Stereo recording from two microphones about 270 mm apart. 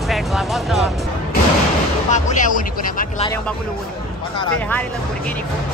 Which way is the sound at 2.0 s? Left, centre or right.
Left.